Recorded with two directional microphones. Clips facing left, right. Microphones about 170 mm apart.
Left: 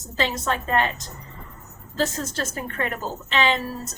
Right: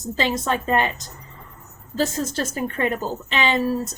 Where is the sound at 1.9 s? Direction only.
15° right (ahead or behind).